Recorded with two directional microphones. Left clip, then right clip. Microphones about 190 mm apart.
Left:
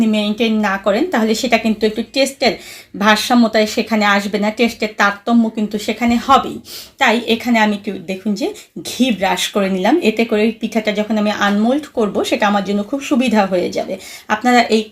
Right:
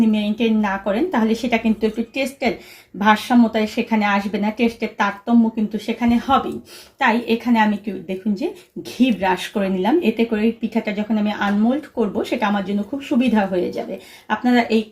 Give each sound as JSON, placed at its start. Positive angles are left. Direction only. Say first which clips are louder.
{"t": 0.0, "sound": "speech", "louder": "left 3 dB", "side_deg": 25}